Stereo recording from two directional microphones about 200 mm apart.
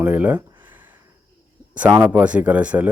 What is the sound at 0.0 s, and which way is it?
Speech, 10° right (ahead or behind).